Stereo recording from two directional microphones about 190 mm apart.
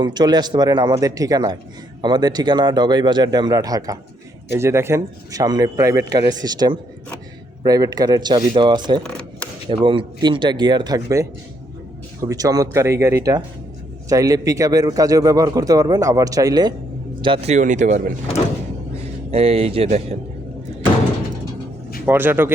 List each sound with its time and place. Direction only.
0.0 s speech: 20° right (ahead or behind)
9.0 s a sound: 5° left (ahead or behind)
9.6 s speech: 25° right (ahead or behind)
19.3 s speech: 30° right (ahead or behind)
22.0 s speech: 10° right (ahead or behind)